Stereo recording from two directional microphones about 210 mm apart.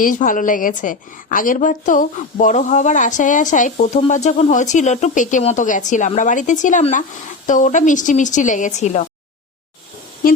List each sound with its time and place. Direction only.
0.0 s a woman's voice: 40° left (ahead or behind)